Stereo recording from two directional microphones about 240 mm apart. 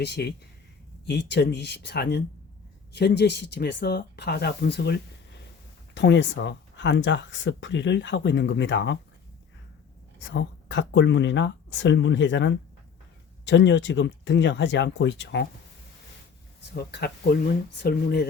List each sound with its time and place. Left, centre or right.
0.0 s speech: left
10.2 s speech: left
16.7 s speech: left